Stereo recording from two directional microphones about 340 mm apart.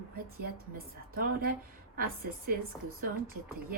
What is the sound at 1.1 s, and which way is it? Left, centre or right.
Speech, right.